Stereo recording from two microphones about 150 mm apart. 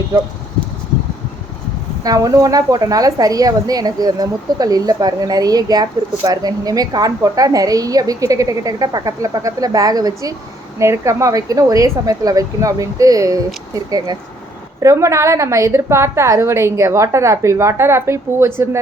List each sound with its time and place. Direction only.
2.0 s a woman's voice: 25° right (ahead or behind)